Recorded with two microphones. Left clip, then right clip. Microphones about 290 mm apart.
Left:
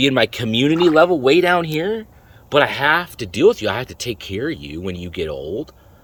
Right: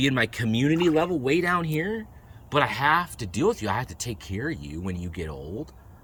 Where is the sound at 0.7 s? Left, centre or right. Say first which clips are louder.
Left 10 dB; left.